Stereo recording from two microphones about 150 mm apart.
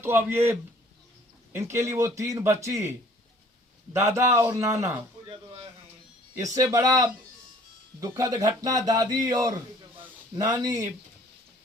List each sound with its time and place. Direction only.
0.0 s a man's voice: 15° right (ahead or behind)
1.5 s speech: 20° right (ahead or behind)
3.9 s speech: 20° right (ahead or behind)
6.4 s speech: 20° right (ahead or behind)